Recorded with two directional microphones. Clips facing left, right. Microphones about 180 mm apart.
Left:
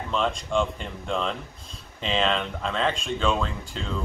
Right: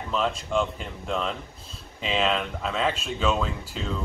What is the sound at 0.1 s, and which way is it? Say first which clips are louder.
Speech: even; 5° right (ahead or behind).